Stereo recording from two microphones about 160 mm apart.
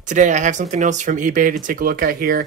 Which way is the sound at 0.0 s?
50° right (ahead or behind).